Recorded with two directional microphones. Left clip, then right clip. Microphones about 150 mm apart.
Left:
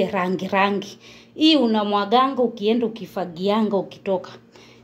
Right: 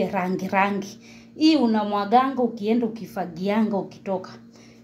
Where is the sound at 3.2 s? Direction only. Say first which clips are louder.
Left 3 dB; 40° left (ahead or behind).